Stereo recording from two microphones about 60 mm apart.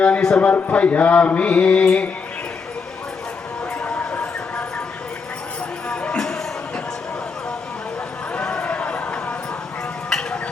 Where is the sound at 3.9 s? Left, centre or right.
Centre.